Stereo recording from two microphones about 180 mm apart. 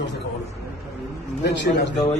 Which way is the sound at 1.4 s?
75° left (ahead or behind).